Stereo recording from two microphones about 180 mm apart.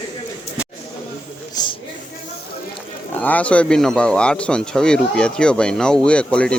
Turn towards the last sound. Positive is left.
turn(degrees=5)  # may be behind; listen again after turning